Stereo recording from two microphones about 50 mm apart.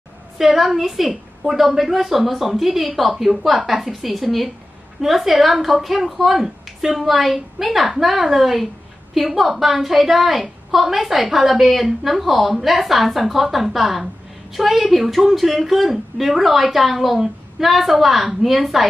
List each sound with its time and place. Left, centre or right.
0.4 s a woman's voice: centre